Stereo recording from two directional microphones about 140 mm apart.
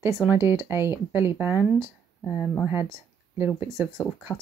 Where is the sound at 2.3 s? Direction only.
5° left (ahead or behind).